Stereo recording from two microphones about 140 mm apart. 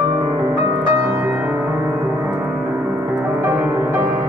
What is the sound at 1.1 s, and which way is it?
Music, 15° right (ahead or behind).